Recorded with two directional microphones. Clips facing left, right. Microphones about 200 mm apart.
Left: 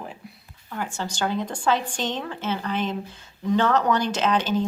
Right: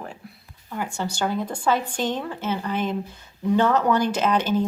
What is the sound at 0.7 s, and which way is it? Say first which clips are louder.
Speech: right 2 dB; 10° right (ahead or behind).